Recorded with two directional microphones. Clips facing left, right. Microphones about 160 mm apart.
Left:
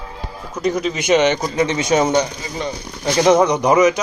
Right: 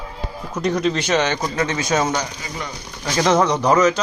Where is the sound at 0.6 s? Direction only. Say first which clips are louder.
Even; 5° left (ahead or behind); by 2.7 s 25° left (ahead or behind).